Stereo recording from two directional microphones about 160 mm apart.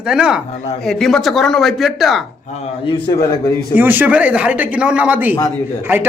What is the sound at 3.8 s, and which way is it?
A man's voice, 10° right (ahead or behind).